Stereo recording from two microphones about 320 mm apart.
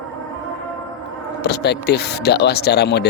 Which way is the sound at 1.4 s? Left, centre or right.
Left.